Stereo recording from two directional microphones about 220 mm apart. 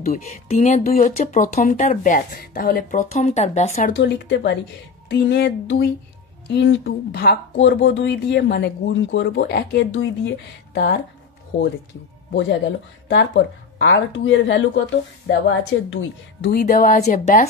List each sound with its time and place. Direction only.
0.0 s speech: 35° left (ahead or behind)
3.9 s speech: 50° left (ahead or behind)
11.5 s speech: 25° left (ahead or behind)
13.1 s speech: 55° left (ahead or behind)
16.5 s speech: 40° left (ahead or behind)